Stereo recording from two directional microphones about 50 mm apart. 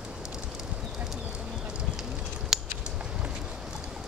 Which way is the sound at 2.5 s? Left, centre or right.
Centre.